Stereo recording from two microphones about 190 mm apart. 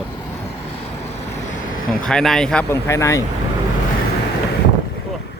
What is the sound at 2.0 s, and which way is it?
Speech, 5° left (ahead or behind).